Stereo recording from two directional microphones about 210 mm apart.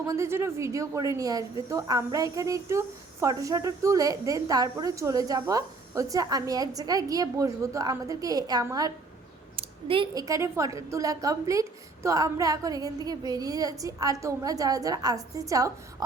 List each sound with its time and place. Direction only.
0.1 s a woman's voice: 10° right (ahead or behind)